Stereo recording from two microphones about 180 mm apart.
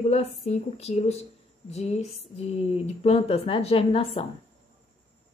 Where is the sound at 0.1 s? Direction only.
35° left (ahead or behind).